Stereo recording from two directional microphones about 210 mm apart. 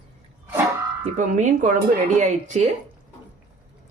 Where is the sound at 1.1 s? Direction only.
35° right (ahead or behind).